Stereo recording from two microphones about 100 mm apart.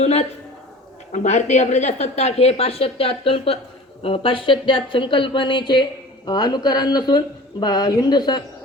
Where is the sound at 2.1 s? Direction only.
90° left.